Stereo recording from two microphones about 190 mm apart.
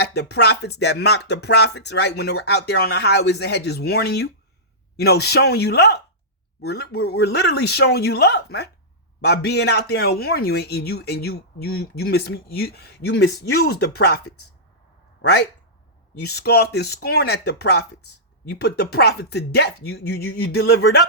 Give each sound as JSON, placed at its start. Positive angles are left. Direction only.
{"t": 0.0, "sound": "speech", "side_deg": 60}
{"t": 15.2, "sound": "speech", "side_deg": 60}